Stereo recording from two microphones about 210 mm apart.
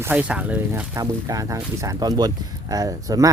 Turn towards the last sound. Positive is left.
turn(degrees=-15)  # may be behind; listen again after turning